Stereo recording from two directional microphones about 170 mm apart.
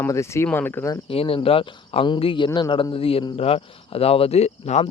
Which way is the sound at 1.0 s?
35° left (ahead or behind).